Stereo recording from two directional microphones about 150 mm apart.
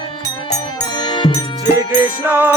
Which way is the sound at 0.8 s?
30° left (ahead or behind).